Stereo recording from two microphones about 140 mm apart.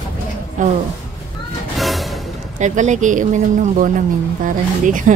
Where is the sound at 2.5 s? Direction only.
60° right (ahead or behind).